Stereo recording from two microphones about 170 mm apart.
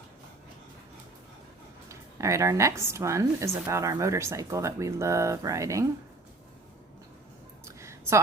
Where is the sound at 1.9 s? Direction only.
15° right (ahead or behind).